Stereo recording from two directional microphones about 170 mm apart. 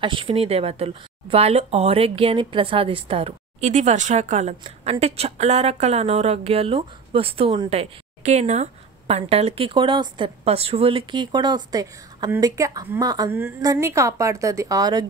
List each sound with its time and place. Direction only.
0.0 s speech: 30° right (ahead or behind)
13.3 s a woman's voice: 15° right (ahead or behind)